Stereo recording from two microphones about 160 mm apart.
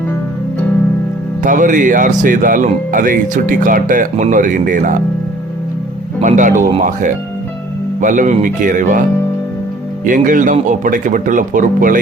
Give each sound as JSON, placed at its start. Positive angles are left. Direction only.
{"t": 1.4, "sound": "speech", "side_deg": -55}
{"t": 6.2, "sound": "speech", "side_deg": -50}